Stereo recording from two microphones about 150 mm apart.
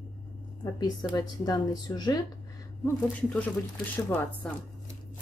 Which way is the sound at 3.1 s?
10° left (ahead or behind).